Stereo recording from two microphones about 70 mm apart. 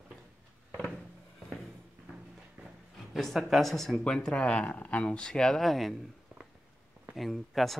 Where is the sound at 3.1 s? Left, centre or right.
Centre.